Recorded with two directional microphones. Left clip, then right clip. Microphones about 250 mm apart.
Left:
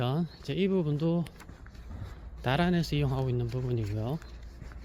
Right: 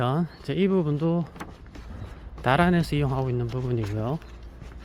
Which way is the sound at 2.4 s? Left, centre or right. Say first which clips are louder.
Right 7 dB; centre.